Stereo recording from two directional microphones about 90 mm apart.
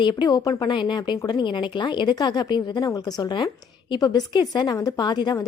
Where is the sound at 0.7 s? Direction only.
60° left (ahead or behind).